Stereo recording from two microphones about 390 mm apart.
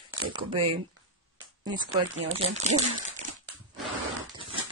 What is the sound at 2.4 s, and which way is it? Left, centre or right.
Speech, centre.